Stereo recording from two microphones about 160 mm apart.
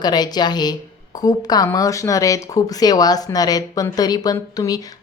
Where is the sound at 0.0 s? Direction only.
25° left (ahead or behind).